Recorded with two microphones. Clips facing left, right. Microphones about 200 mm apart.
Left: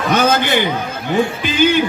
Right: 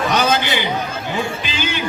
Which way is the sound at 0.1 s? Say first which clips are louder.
Left 7 dB; 50° left (ahead or behind).